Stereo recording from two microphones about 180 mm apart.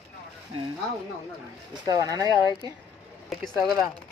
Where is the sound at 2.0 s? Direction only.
20° right (ahead or behind).